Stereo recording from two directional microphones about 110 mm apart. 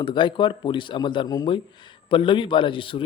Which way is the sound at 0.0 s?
45° left (ahead or behind).